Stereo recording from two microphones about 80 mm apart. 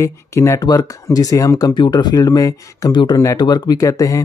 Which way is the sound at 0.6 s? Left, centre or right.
Left.